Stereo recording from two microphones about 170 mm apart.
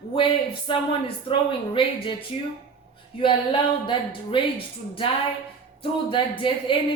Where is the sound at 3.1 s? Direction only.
30° left (ahead or behind).